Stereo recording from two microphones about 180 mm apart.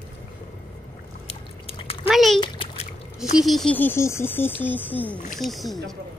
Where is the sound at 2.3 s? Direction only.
30° left (ahead or behind).